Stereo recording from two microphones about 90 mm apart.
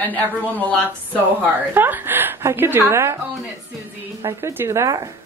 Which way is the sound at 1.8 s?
20° right (ahead or behind).